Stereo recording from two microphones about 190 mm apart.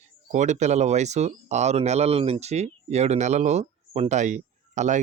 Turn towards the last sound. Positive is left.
turn(degrees=-40)  # may be behind; listen again after turning